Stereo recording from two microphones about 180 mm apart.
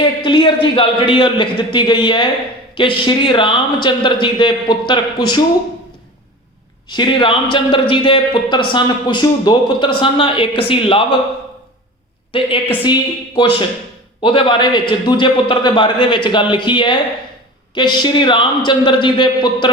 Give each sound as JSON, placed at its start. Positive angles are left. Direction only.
{"t": 0.0, "sound": "a man's voice", "side_deg": 25}
{"t": 6.8, "sound": "a man's voice", "side_deg": 25}
{"t": 12.3, "sound": "a man's voice", "side_deg": 30}